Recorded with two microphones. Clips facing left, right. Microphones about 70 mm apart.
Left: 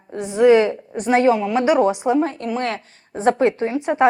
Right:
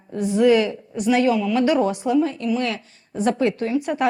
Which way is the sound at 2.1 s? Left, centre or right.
Left.